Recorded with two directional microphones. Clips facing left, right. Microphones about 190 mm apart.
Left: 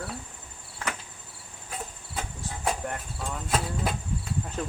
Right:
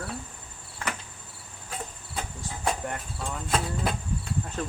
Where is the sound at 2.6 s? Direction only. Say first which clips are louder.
Even; centre (ahead or behind).